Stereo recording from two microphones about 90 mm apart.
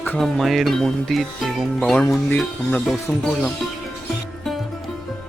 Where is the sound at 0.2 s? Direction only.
Centre (ahead or behind).